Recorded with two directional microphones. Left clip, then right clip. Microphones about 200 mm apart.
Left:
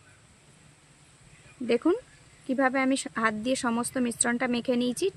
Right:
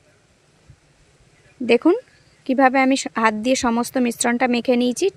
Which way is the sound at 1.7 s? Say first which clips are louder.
Right 9 dB; 40° right (ahead or behind).